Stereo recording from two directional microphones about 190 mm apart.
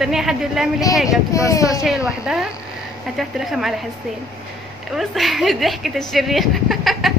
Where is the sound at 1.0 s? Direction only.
15° left (ahead or behind).